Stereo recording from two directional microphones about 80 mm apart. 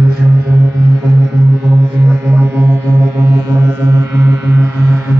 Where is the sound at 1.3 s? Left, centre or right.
Right.